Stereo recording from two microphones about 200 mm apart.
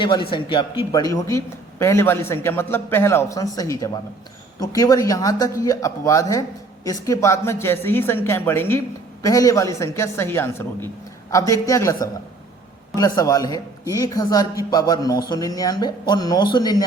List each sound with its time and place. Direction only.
0.0 s a man's voice: 25° left (ahead or behind)